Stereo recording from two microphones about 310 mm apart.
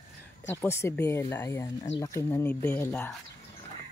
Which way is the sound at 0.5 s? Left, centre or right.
Centre.